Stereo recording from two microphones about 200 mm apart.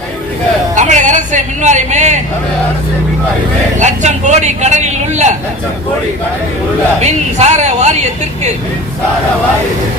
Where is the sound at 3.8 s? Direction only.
35° right (ahead or behind).